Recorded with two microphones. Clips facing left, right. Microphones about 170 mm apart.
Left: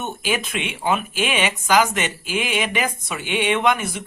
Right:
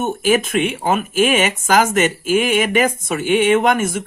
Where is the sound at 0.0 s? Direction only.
50° right (ahead or behind).